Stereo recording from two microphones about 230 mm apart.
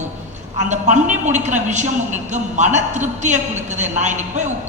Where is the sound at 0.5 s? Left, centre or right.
Right.